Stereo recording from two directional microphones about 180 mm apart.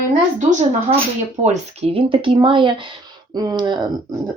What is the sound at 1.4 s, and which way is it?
Speech, 35° right (ahead or behind).